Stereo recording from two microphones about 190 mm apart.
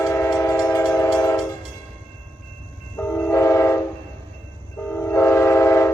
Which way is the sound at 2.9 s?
10° left (ahead or behind).